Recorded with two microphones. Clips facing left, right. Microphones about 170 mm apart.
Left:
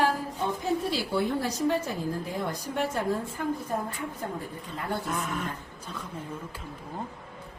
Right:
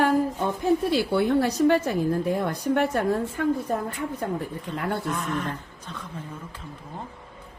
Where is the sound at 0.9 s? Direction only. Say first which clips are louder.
Right 6 dB; 65° right (ahead or behind).